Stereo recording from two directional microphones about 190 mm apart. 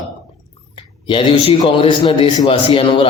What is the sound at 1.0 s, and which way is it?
A man's voice, 30° left (ahead or behind).